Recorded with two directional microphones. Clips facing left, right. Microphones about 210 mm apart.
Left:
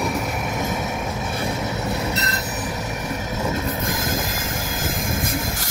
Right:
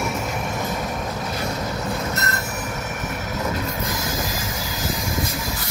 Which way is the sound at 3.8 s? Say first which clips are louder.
Left 2 dB; 50° left (ahead or behind).